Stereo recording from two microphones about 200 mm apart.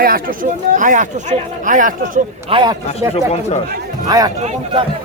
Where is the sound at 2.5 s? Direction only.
20° right (ahead or behind).